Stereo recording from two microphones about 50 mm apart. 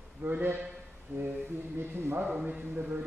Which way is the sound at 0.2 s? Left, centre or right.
Right.